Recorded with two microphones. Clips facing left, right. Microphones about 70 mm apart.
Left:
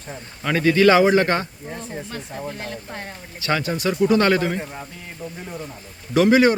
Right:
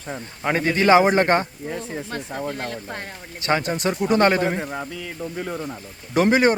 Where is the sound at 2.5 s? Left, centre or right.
Right.